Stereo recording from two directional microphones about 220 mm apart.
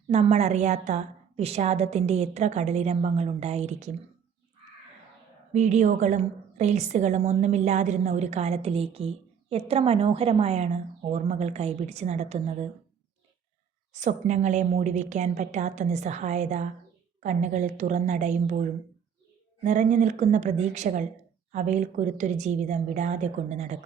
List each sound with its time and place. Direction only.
0.1 s a woman's voice: 30° right (ahead or behind)
5.5 s a woman's voice: 30° right (ahead or behind)
13.9 s a woman's voice: 30° right (ahead or behind)
19.6 s a woman's voice: 30° right (ahead or behind)